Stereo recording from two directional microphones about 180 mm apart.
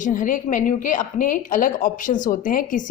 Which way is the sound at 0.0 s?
45° left (ahead or behind).